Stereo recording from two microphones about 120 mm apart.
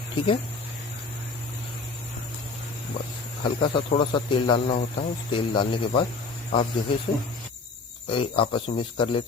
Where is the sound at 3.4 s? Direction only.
45° left (ahead or behind).